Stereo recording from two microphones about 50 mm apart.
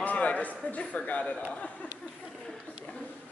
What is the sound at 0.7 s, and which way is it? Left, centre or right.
Speech, left.